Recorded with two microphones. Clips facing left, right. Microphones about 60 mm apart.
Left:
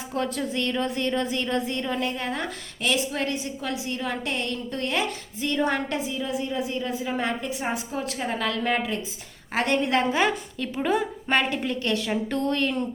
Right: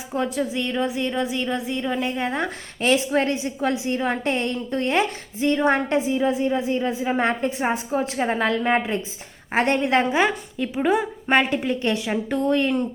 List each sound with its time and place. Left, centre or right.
0.1 s speech: centre